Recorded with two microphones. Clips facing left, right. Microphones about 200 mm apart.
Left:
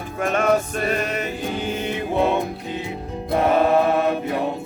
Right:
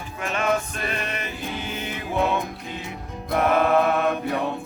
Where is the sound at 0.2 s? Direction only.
50° left (ahead or behind).